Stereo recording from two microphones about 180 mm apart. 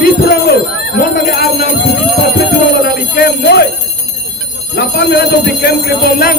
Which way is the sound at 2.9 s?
65° left (ahead or behind).